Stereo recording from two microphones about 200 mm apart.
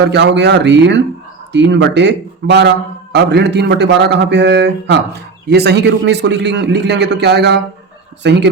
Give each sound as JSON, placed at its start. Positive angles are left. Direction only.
{"t": 0.0, "sound": "a man's voice", "side_deg": -60}